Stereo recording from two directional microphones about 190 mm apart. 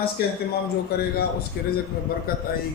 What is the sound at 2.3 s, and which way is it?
Speech, 50° left (ahead or behind).